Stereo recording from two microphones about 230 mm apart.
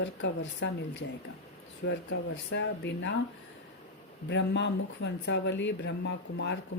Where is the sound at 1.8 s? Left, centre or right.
Left.